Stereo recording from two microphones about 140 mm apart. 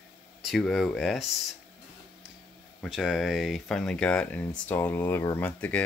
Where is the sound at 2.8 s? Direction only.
5° right (ahead or behind).